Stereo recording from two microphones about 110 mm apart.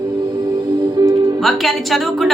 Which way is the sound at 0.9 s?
35° right (ahead or behind).